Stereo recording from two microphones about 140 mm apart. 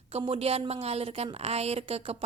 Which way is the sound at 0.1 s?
45° right (ahead or behind).